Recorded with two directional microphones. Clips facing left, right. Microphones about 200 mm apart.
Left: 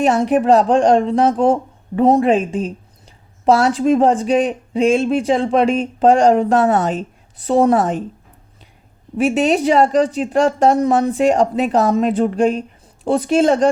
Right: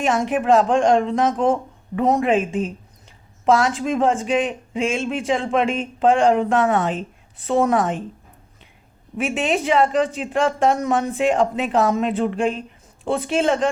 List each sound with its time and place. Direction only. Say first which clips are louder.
0.0 s a man's voice: left 6 dB; 35° left (ahead or behind)
9.1 s a man's voice: left 6 dB; 40° left (ahead or behind)